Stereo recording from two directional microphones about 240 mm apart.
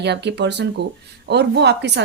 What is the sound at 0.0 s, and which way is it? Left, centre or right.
A woman's voice, right.